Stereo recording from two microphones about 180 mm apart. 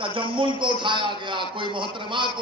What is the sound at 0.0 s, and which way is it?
A man's voice, 30° right (ahead or behind).